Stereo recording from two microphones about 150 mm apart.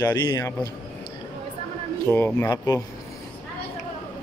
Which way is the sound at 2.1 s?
15° left (ahead or behind).